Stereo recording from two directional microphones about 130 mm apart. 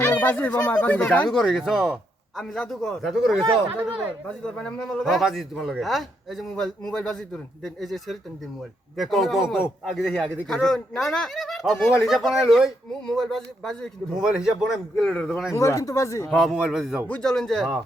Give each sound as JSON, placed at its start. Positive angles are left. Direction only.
{"t": 0.0, "sound": "a man's voice", "side_deg": 15}
{"t": 15.5, "sound": "speech", "side_deg": 25}
{"t": 16.3, "sound": "a man's voice", "side_deg": 0}